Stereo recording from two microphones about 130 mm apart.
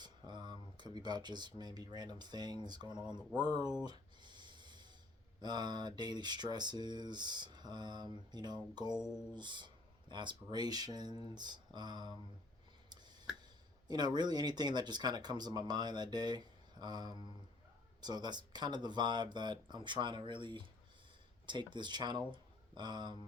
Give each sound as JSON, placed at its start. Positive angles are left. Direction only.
{"t": 0.0, "sound": "speech", "side_deg": -35}
{"t": 3.8, "sound": "a sound", "side_deg": -35}
{"t": 5.4, "sound": "speech", "side_deg": -35}
{"t": 9.0, "sound": "speech", "side_deg": -5}
{"t": 9.3, "sound": "speech", "side_deg": -35}
{"t": 12.9, "sound": "a sound", "side_deg": -35}
{"t": 13.8, "sound": "speech", "side_deg": -35}